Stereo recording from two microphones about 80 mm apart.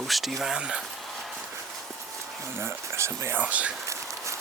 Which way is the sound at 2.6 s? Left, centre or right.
Right.